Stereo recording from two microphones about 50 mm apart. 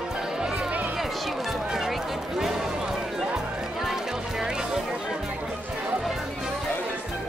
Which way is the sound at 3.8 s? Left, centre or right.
Centre.